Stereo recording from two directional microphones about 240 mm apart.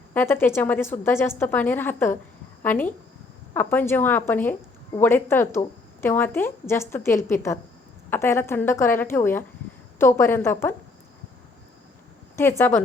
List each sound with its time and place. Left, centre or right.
0.1 s a woman's voice: centre
12.4 s a woman's voice: centre